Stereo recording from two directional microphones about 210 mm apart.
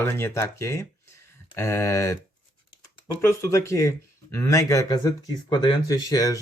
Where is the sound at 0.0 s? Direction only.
10° left (ahead or behind).